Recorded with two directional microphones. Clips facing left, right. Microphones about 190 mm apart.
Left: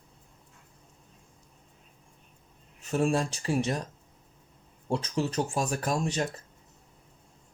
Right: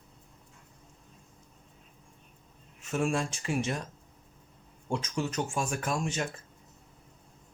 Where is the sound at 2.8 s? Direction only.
35° left (ahead or behind).